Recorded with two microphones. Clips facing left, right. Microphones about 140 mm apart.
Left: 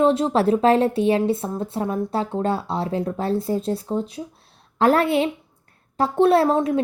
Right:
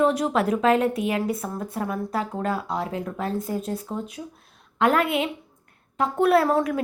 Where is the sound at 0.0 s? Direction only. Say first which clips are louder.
Left 3 dB; 25° left (ahead or behind).